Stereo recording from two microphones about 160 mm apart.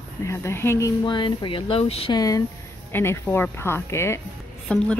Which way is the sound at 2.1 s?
20° left (ahead or behind).